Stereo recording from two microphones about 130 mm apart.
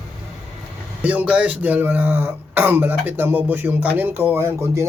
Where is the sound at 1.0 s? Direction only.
10° right (ahead or behind).